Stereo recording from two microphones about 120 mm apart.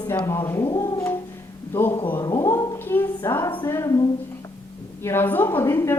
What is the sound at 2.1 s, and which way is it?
Speech, 35° left (ahead or behind).